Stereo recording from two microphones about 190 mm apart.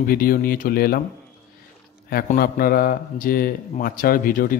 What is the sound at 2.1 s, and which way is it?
A man's voice, 50° left (ahead or behind).